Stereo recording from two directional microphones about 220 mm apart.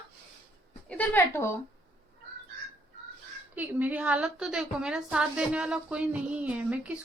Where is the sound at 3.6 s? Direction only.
5° right (ahead or behind).